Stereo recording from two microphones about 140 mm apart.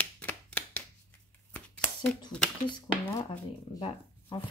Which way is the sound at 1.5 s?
10° left (ahead or behind).